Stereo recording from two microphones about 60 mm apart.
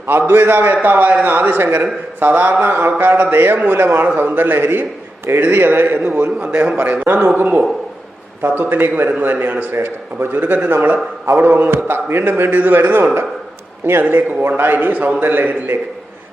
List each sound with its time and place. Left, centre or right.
0.1 s a man's voice: right
0.8 s a man's voice: right
10.6 s a man's voice: right
11.4 s a man's voice: right